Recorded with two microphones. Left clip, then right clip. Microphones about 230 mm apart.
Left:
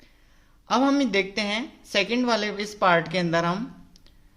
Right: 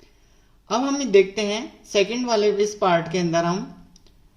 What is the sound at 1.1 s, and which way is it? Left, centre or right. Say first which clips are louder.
Speech: right 7 dB; left.